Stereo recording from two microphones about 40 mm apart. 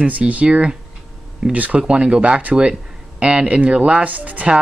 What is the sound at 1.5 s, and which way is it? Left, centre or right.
Speech, right.